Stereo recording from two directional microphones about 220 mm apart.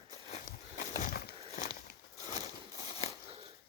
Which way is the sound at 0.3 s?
35° left (ahead or behind).